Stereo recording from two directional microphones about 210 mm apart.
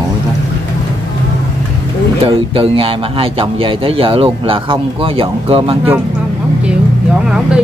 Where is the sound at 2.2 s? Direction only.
25° right (ahead or behind).